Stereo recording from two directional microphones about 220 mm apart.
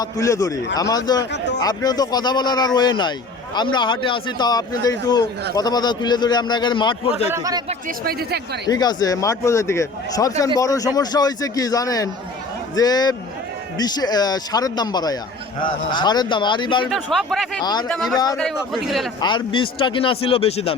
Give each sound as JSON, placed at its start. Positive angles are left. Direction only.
{"t": 0.0, "sound": "a man's voice", "side_deg": 15}
{"t": 7.3, "sound": "speech", "side_deg": -15}
{"t": 7.7, "sound": "speech", "side_deg": -40}
{"t": 8.6, "sound": "a man's voice", "side_deg": 20}
{"t": 16.9, "sound": "speech", "side_deg": 0}
{"t": 17.6, "sound": "a man's voice", "side_deg": 20}
{"t": 17.8, "sound": "speech", "side_deg": 0}
{"t": 19.2, "sound": "a man's voice", "side_deg": 20}